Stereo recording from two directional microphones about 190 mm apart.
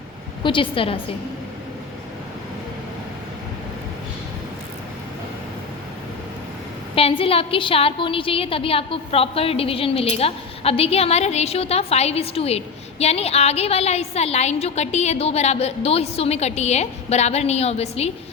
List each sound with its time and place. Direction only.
0.4 s a woman's voice: 25° left (ahead or behind)
6.9 s a woman's voice: 30° left (ahead or behind)